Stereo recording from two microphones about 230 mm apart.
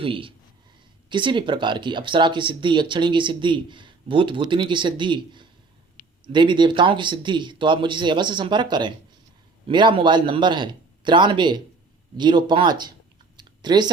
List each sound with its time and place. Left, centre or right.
0.0 s speech: right
13.3 s clicking: centre